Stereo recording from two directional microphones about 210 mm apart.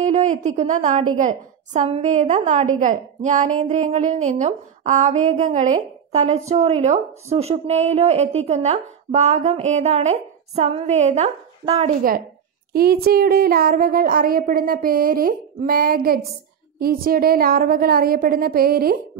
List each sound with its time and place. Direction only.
0.0 s a woman's voice: 35° right (ahead or behind)